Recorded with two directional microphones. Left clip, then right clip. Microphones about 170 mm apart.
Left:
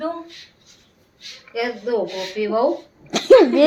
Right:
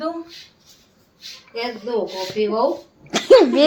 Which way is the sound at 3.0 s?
5° left (ahead or behind).